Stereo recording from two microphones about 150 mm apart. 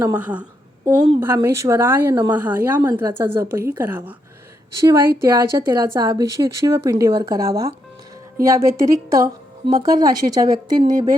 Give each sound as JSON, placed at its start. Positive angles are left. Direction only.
{"t": 0.2, "sound": "speech", "side_deg": -10}
{"t": 4.8, "sound": "a woman's voice", "side_deg": -25}